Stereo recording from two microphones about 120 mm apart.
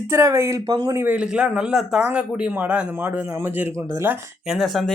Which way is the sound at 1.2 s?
10° right (ahead or behind).